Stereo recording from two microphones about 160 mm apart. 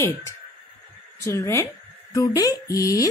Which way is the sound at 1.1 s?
20° left (ahead or behind).